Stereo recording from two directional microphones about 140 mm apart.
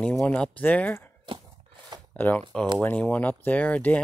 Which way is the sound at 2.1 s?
15° left (ahead or behind).